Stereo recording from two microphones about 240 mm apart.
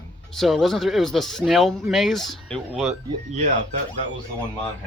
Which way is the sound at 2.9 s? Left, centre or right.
Right.